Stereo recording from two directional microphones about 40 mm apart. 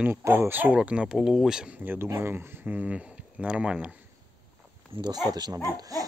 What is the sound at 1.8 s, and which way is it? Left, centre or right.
Speech, right.